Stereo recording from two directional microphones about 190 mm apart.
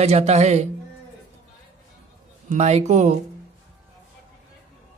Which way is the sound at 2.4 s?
35° right (ahead or behind).